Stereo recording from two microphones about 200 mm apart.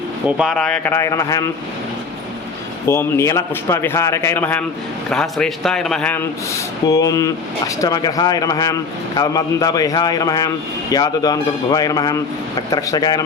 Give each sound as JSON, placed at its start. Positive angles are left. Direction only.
{"t": 0.3, "sound": "a man's voice", "side_deg": 0}
{"t": 2.8, "sound": "a man's voice", "side_deg": 15}